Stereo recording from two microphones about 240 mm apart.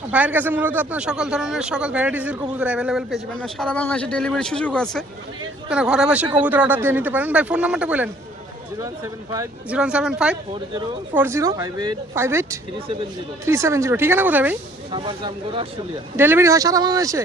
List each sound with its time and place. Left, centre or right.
0.1 s a man's voice: centre
9.3 s a man's voice: centre
14.9 s speech: right
16.1 s speech: centre